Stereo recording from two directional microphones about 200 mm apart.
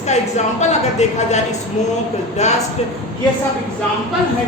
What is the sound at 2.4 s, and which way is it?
Speech, 35° left (ahead or behind).